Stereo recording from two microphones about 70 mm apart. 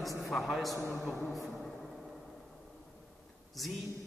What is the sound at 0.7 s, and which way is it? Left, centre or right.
Speech, left.